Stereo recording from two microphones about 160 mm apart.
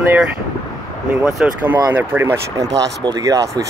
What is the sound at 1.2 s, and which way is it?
Speech, 10° right (ahead or behind).